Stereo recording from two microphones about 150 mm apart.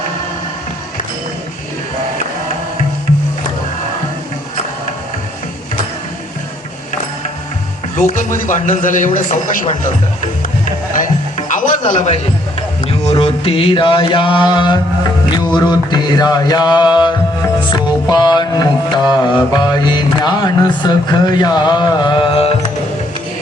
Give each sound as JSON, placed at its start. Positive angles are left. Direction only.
{"t": 7.9, "sound": "a man's voice", "side_deg": 60}
{"t": 11.4, "sound": "a sound", "side_deg": 60}
{"t": 12.9, "sound": "mantra", "side_deg": 40}
{"t": 15.4, "sound": "music", "side_deg": 30}